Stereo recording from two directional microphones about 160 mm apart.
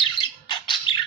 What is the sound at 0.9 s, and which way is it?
Squawk, 35° left (ahead or behind).